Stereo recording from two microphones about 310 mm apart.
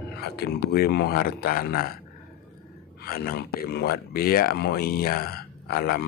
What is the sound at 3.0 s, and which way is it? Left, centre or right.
Speech, left.